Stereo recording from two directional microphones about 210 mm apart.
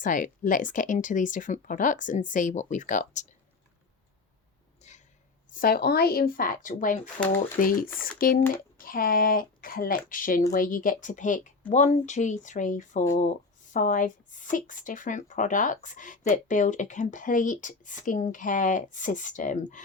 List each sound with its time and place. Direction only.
0.0 s speech: 40° left (ahead or behind)
4.8 s a sound: 35° left (ahead or behind)
5.5 s speech: 45° left (ahead or behind)